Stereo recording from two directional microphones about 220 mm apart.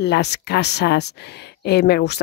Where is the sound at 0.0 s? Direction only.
50° left (ahead or behind).